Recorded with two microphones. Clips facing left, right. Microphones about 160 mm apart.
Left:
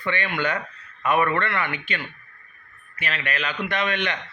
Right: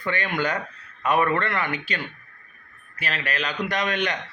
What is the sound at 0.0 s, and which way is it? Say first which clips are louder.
Speech: even; 40° right (ahead or behind).